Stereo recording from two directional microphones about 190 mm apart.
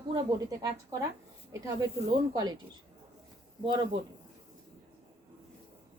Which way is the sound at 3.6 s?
25° right (ahead or behind).